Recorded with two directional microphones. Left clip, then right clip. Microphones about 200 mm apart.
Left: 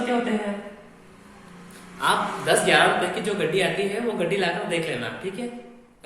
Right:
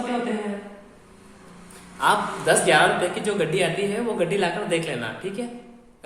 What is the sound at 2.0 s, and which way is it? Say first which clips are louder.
A man's voice: right 2 dB; 25° right (ahead or behind).